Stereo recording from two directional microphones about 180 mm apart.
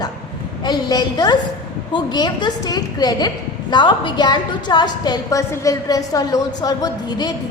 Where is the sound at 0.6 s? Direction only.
25° left (ahead or behind).